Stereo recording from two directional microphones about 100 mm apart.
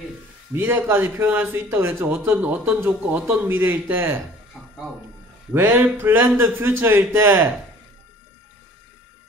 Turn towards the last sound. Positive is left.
turn(degrees=-20)  # may be behind; listen again after turning